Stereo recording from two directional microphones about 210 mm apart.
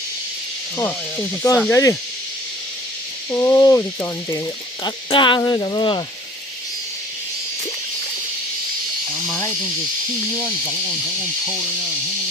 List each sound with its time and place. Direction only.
1.4 s speech: 10° left (ahead or behind)
3.3 s cricket: 15° left (ahead or behind)